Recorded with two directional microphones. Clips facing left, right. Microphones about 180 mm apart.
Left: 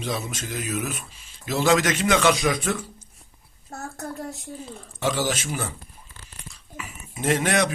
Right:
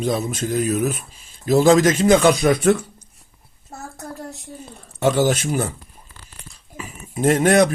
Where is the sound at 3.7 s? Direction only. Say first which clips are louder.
Left 1 dB; centre (ahead or behind).